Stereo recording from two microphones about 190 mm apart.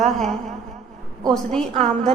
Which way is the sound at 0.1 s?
Centre (ahead or behind).